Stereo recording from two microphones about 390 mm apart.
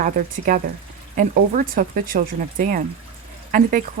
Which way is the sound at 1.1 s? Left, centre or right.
Right.